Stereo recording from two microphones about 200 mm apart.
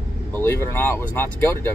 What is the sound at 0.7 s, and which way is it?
Speech, 10° left (ahead or behind).